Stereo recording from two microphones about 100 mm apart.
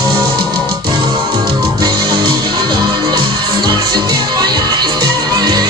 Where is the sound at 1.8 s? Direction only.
45° right (ahead or behind).